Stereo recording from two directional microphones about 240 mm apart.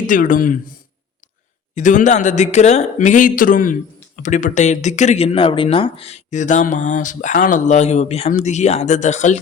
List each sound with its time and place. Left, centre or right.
0.1 s speech: left
1.7 s speech: left